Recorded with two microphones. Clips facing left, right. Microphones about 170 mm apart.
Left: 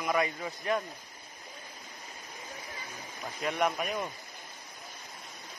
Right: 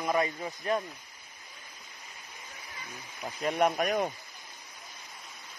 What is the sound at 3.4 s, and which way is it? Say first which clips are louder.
Speech: right 3 dB; 40° right (ahead or behind).